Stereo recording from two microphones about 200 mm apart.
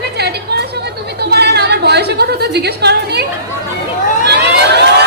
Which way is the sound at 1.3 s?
55° right (ahead or behind).